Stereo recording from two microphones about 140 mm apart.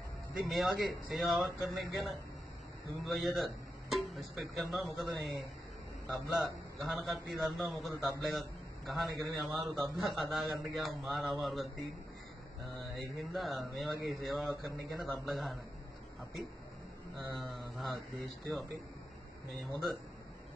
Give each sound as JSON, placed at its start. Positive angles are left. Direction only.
{"t": 0.5, "sound": "a man's voice", "side_deg": 0}
{"t": 3.1, "sound": "a man's voice", "side_deg": 0}
{"t": 12.9, "sound": "a man's voice", "side_deg": 0}
{"t": 17.2, "sound": "a man's voice", "side_deg": 0}